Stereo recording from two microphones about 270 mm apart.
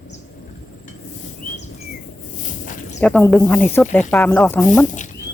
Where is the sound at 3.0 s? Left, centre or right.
Centre.